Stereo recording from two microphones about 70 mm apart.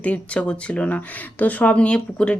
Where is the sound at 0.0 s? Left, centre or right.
Centre.